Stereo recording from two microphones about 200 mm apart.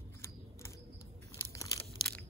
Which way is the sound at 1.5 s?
15° left (ahead or behind).